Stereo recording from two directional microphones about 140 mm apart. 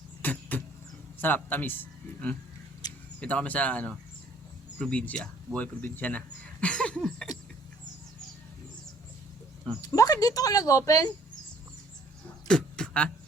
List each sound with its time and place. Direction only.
0.2 s vehicle: 10° left (ahead or behind)
1.2 s a man's voice: 15° left (ahead or behind)
2.8 s a sound: 30° left (ahead or behind)
3.2 s speech: 10° left (ahead or behind)
9.8 s speech: 25° left (ahead or behind)
12.5 s a sound: 5° left (ahead or behind)